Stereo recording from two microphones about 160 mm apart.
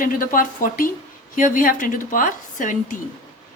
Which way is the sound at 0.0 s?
60° left (ahead or behind).